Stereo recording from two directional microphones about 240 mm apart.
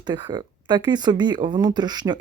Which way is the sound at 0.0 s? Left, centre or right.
Centre.